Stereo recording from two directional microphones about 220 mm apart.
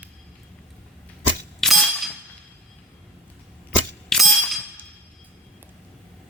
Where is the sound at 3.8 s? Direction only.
Centre (ahead or behind).